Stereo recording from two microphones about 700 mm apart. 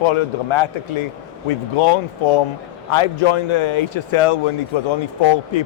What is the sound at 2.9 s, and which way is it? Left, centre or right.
Speech, left.